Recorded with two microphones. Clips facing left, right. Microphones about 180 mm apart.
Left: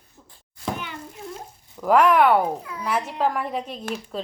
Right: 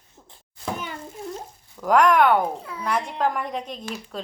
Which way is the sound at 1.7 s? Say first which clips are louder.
Left 1 dB; 5° left (ahead or behind).